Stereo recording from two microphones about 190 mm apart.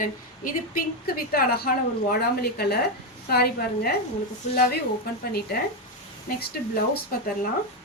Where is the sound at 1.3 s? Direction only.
55° left (ahead or behind).